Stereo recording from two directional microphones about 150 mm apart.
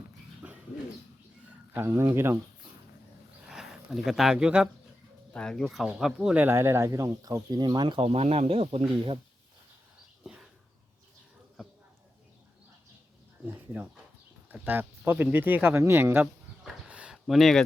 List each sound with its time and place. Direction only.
1.7 s speech: 20° right (ahead or behind)
3.5 s speech: 5° right (ahead or behind)
5.3 s speech: 5° left (ahead or behind); by 9.1 s 40° right (ahead or behind)
10.2 s a sound: 5° right (ahead or behind)
14.5 s speech: 10° right (ahead or behind)
16.6 s a sound: 5° right (ahead or behind)